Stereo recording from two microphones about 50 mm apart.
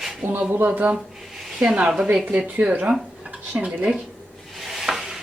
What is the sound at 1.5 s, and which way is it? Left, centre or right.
Speech, right.